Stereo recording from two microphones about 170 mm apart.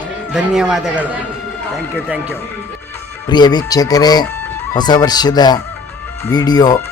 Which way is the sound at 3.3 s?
25° left (ahead or behind).